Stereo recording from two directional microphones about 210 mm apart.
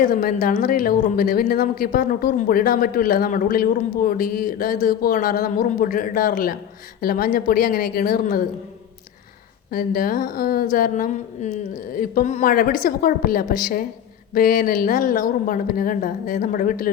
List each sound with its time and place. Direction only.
0.0 s speech: 40° left (ahead or behind)
9.7 s speech: 45° left (ahead or behind)